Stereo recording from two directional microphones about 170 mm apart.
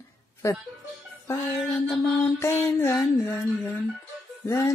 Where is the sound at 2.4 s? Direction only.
15° left (ahead or behind).